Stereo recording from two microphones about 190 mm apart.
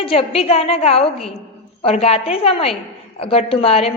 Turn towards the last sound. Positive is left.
turn(degrees=30)  # may be behind; listen again after turning